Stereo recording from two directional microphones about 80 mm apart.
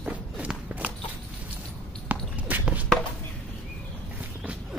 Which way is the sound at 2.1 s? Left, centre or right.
Right.